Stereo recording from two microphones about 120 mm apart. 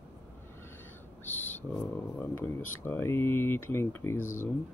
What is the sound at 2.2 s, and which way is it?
Speech, 20° left (ahead or behind).